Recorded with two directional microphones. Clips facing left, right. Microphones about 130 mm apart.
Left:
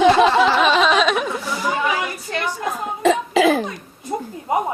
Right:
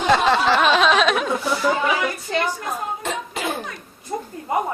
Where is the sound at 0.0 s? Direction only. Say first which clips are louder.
Left 5 dB; 90° left.